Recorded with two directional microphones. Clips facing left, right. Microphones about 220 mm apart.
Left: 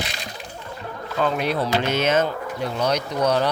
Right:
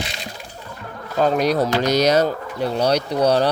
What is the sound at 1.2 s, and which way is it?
Speech, 40° right (ahead or behind).